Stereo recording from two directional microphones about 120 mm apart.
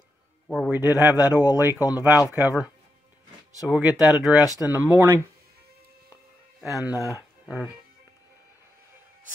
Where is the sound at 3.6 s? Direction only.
5° right (ahead or behind).